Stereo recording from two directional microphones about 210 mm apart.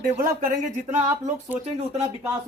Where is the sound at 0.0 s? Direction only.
40° right (ahead or behind).